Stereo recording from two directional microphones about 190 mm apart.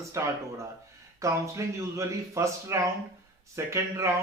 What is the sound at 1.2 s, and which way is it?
Speech, 15° right (ahead or behind).